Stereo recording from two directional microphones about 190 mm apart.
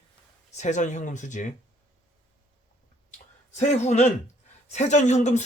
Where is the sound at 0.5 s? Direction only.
40° left (ahead or behind).